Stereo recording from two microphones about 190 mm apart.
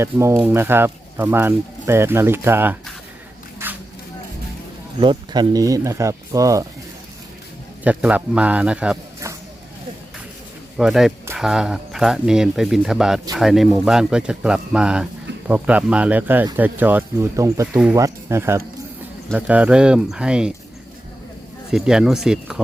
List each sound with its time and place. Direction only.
0.0 s speech: 15° right (ahead or behind)
3.6 s zipper: 10° right (ahead or behind)
4.9 s speech: 25° right (ahead or behind)
7.9 s speech: 5° right (ahead or behind)
10.8 s speech: centre (ahead or behind)
21.7 s speech: 5° right (ahead or behind)